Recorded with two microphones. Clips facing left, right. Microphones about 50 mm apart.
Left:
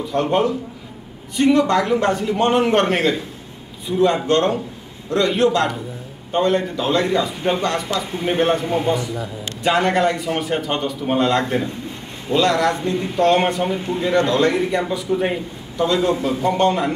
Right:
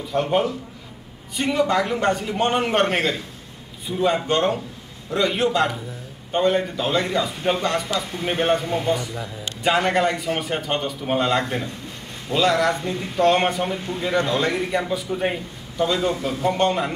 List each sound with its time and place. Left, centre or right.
0.0 s a man's voice: centre
8.6 s a man's voice: centre
9.6 s a man's voice: centre